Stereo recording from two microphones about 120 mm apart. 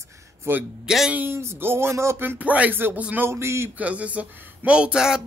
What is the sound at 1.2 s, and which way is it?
Speech, 20° right (ahead or behind).